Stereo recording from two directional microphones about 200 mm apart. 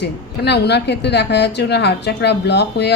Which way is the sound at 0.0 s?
60° left (ahead or behind).